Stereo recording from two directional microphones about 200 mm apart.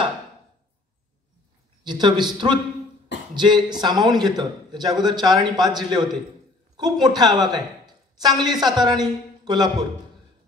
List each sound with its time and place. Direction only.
1.9 s a man's voice: 20° right (ahead or behind)